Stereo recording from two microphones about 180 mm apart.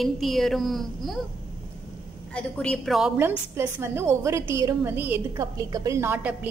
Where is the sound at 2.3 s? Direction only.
5° left (ahead or behind).